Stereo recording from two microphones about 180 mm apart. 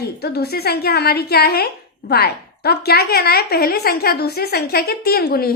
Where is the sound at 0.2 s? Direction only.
60° left (ahead or behind).